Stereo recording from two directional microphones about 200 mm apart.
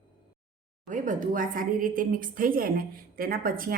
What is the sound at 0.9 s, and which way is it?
A woman's voice, 40° right (ahead or behind).